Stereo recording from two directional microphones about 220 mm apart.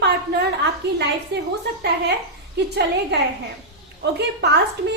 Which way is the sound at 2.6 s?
50° right (ahead or behind).